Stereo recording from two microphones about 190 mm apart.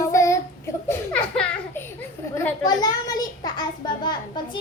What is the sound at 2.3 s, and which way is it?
A child's voice, 15° left (ahead or behind).